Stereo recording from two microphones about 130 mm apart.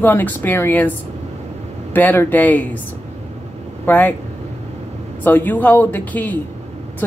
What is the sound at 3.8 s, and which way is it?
Speech, 15° left (ahead or behind).